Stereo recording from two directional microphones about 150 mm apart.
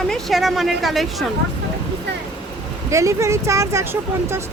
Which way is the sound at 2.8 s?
20° right (ahead or behind).